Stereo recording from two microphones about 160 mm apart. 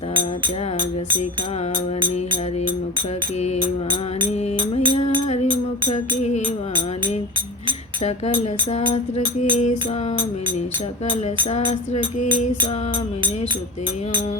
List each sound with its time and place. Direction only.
4.5 s music: 30° right (ahead or behind)
5.9 s music: 45° left (ahead or behind)
8.9 s music: 40° left (ahead or behind)